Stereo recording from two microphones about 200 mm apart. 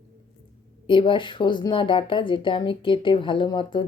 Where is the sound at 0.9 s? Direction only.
25° left (ahead or behind).